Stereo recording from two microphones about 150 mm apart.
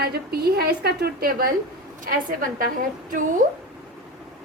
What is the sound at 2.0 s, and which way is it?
Speech, 65° right (ahead or behind).